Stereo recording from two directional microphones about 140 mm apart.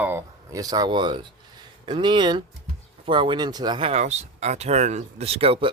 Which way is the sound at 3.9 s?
50° right (ahead or behind).